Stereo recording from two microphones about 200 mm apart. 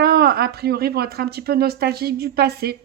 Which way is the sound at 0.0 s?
50° right (ahead or behind).